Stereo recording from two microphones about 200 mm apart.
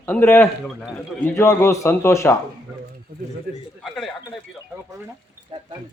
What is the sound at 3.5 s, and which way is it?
Speech, 50° right (ahead or behind).